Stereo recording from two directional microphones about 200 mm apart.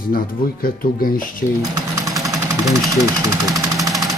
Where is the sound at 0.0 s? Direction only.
45° left (ahead or behind).